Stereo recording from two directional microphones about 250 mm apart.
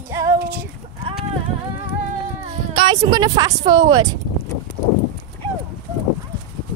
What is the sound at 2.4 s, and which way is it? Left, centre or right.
Speech, right.